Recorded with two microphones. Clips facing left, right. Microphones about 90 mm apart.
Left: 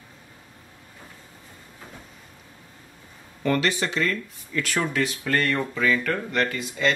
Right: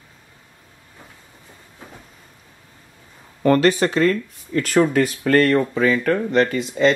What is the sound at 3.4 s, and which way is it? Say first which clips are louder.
Speech: right 8 dB; 40° right (ahead or behind).